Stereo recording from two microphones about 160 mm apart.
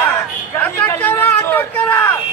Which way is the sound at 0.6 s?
10° left (ahead or behind).